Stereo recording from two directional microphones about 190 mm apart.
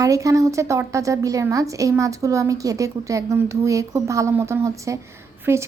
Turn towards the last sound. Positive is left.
turn(degrees=-15)  # may be behind; listen again after turning